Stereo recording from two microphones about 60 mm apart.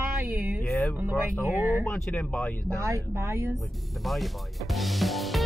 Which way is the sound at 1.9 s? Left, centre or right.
Left.